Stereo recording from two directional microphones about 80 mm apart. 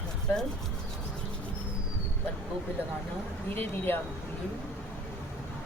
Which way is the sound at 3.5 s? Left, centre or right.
Left.